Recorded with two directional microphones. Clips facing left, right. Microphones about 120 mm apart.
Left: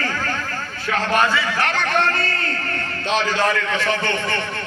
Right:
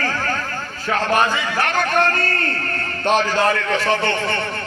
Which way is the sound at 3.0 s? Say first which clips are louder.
Right 3 dB; 45° right (ahead or behind).